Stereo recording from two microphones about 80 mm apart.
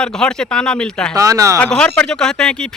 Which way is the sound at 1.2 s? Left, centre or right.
Right.